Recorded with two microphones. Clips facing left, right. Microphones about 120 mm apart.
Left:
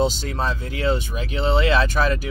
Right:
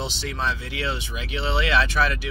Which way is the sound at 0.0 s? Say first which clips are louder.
Left 6 dB; 45° left (ahead or behind).